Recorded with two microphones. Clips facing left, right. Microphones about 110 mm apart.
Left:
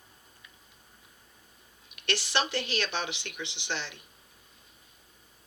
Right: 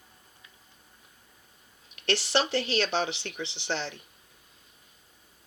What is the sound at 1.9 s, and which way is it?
Speech, 30° right (ahead or behind).